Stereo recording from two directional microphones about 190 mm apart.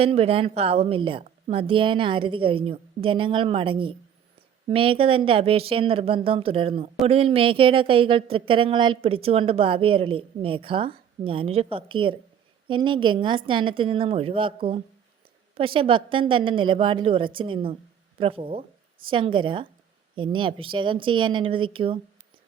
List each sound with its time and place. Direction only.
0.0 s speech: 30° right (ahead or behind)